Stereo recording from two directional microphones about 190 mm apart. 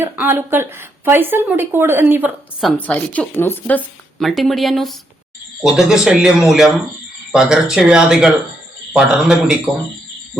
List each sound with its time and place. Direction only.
0.0 s speech: 10° right (ahead or behind)